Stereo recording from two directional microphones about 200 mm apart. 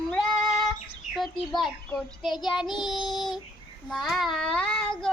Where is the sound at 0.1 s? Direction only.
Centre (ahead or behind).